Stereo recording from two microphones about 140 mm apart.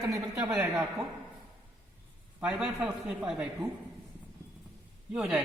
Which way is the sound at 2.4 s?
5° right (ahead or behind).